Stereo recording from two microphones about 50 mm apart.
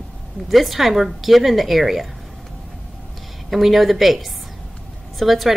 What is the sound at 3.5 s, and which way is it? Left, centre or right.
A woman's voice, centre.